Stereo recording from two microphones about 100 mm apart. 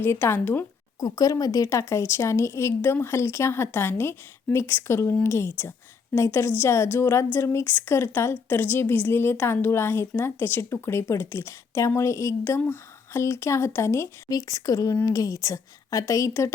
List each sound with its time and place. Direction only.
0.0 s a woman's voice: 25° left (ahead or behind)
0.9 s a woman's voice: 35° left (ahead or behind)